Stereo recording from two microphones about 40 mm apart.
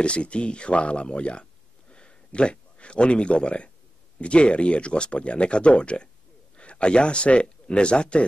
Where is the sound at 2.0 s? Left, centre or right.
Left.